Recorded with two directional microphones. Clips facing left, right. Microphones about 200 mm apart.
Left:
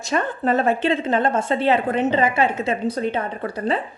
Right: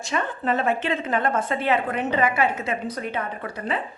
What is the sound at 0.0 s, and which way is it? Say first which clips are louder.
A woman's voice: left 4 dB; 40° left (ahead or behind).